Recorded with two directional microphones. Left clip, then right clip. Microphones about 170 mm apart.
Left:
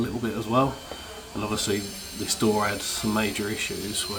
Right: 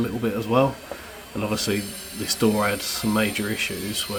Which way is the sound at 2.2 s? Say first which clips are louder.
Right 2 dB; 15° right (ahead or behind).